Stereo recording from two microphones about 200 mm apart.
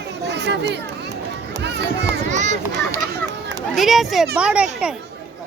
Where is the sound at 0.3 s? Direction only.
60° right (ahead or behind).